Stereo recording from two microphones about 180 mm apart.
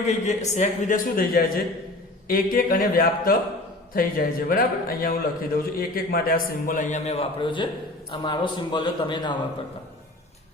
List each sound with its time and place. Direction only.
0.1 s a man's voice: 40° left (ahead or behind)